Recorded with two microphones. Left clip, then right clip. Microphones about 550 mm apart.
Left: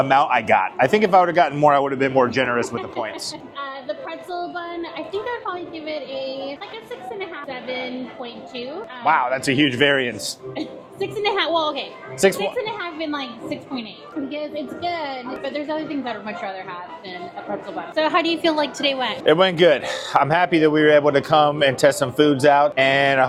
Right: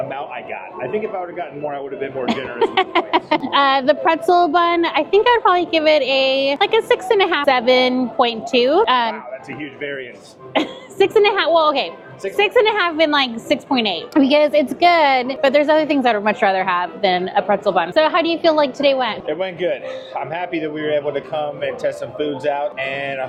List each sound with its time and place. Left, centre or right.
0.1 s a man's voice: left
3.5 s a woman's voice: right
9.1 s a man's voice: left
10.5 s a woman's voice: right
19.2 s a man's voice: left